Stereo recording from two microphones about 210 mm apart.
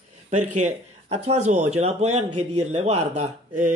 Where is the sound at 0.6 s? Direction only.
30° right (ahead or behind).